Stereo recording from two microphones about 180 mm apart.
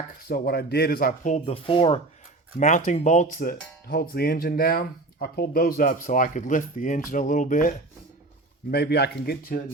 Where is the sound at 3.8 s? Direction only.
60° left (ahead or behind).